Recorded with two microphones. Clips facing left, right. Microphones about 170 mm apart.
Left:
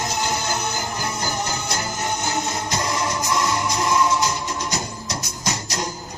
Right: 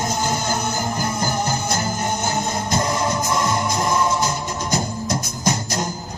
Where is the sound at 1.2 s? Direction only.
50° right (ahead or behind).